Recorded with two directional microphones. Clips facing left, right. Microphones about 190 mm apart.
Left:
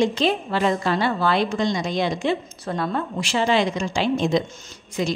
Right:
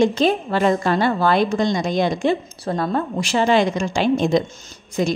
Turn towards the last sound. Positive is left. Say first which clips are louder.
# right 4 dB
turn(degrees=-50)  # may be behind; listen again after turning